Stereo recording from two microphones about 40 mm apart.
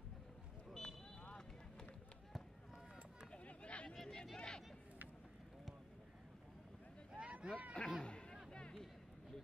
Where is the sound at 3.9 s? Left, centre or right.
Centre.